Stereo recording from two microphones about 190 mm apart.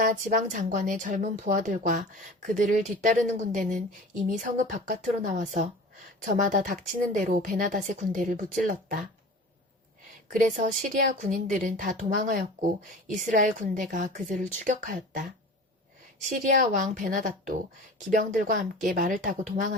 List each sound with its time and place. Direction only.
0.0 s a woman's voice: 45° right (ahead or behind)
10.2 s a woman's voice: 40° right (ahead or behind)
16.4 s a woman's voice: 40° right (ahead or behind)